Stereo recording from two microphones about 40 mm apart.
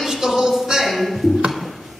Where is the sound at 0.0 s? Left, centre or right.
Centre.